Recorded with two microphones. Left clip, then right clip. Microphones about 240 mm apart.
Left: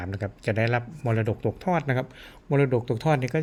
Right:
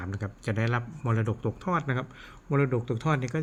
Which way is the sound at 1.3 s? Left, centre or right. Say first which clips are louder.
Left 4 dB; centre.